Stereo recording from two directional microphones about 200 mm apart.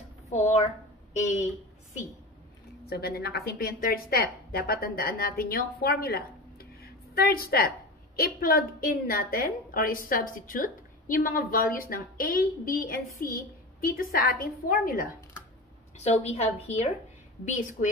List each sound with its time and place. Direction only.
0.3 s a woman's voice: 35° left (ahead or behind)
2.8 s a woman's voice: 50° left (ahead or behind)
16.0 s a woman's voice: 30° left (ahead or behind)